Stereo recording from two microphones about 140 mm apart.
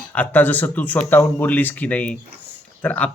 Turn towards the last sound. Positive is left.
turn(degrees=10)  # may be behind; listen again after turning